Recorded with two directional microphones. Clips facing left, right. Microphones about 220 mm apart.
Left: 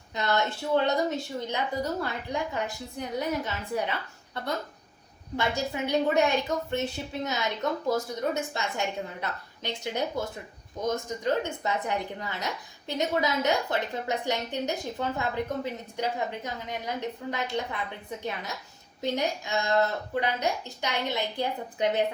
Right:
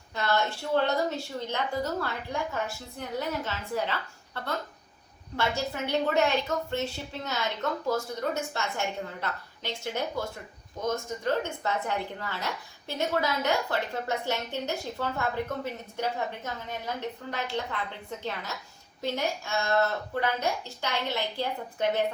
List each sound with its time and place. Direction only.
0.1 s a woman's voice: 20° left (ahead or behind)
5.4 s a woman's voice: 15° left (ahead or behind)
9.6 s a woman's voice: 15° left (ahead or behind)